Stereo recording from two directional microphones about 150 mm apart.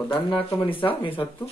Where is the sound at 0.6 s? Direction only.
35° left (ahead or behind).